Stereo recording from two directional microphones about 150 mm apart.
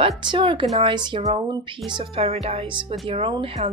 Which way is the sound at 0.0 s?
30° right (ahead or behind).